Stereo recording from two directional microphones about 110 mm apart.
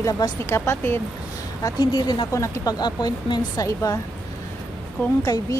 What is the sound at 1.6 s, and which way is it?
A woman's voice, 40° left (ahead or behind).